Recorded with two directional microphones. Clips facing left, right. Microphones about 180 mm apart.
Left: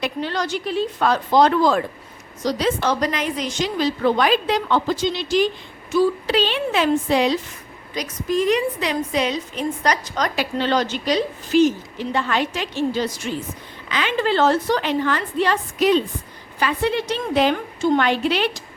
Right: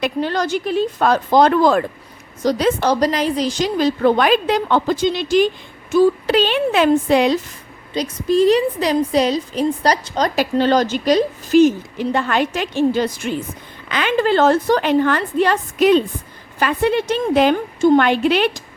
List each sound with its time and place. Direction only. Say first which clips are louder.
0.0 s a woman's voice: right 5 dB; 45° right (ahead or behind)
7.9 s a woman's voice: right 6 dB; 30° right (ahead or behind); by 18.6 s 50° right (ahead or behind)